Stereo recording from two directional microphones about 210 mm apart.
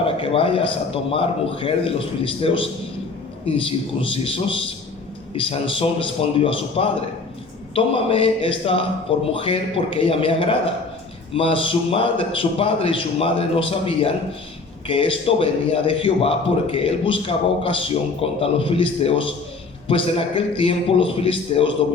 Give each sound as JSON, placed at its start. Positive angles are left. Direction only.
{"t": 0.0, "sound": "a man's voice", "side_deg": 25}